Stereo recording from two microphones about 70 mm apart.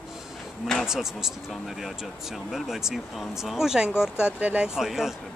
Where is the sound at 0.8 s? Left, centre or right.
Centre.